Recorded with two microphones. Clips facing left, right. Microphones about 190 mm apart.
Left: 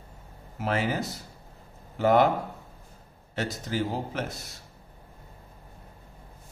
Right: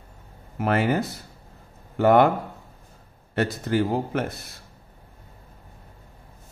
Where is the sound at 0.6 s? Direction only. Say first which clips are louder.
Right 5 dB; 55° right (ahead or behind).